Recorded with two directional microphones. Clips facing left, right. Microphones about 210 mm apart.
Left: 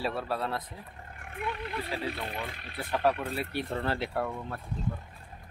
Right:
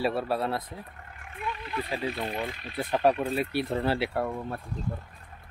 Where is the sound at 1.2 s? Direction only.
55° left (ahead or behind).